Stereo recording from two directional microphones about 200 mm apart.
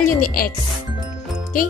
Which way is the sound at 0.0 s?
45° left (ahead or behind).